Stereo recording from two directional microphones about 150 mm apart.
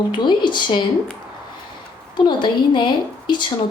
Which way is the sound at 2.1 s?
30° left (ahead or behind).